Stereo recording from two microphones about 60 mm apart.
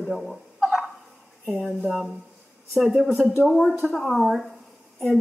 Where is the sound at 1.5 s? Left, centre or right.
Centre.